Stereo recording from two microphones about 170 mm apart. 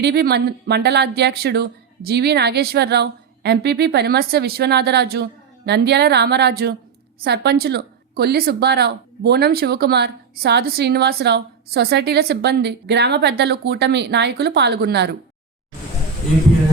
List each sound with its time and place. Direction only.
0.0 s speech: 70° right (ahead or behind)